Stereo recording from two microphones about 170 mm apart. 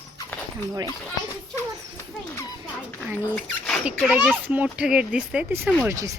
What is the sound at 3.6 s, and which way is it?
Speech, centre (ahead or behind).